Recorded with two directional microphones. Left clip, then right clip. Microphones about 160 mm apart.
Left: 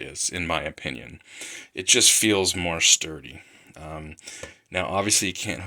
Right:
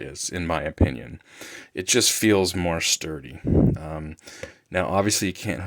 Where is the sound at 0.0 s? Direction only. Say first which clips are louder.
Left 1 dB; 40° right (ahead or behind).